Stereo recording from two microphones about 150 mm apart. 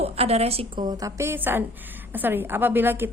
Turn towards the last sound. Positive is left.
turn(degrees=-15)  # may be behind; listen again after turning